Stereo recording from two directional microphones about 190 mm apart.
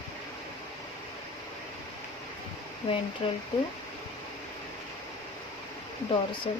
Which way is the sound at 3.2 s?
30° left (ahead or behind).